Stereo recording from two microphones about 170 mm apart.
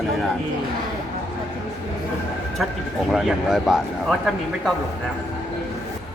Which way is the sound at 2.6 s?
Centre (ahead or behind).